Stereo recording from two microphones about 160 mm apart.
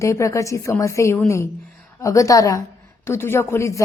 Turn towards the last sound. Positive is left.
turn(degrees=15)  # may be behind; listen again after turning